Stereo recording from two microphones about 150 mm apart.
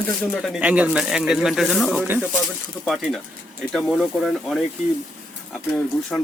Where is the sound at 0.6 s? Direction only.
10° right (ahead or behind).